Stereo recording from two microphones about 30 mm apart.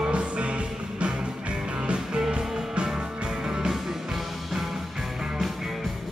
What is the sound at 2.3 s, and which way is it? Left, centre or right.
Music, right.